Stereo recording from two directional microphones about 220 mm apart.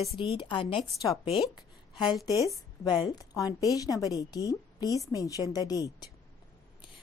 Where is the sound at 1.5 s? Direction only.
20° left (ahead or behind).